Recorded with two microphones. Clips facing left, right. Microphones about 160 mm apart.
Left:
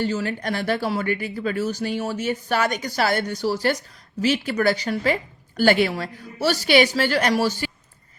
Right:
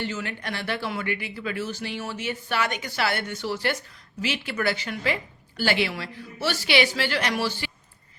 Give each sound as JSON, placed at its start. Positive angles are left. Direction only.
{"t": 0.0, "sound": "speech", "side_deg": 40}